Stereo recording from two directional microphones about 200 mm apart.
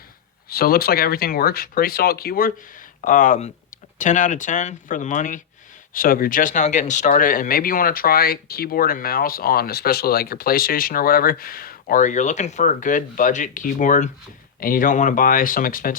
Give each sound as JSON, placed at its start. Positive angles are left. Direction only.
{"t": 0.5, "sound": "speech", "side_deg": 50}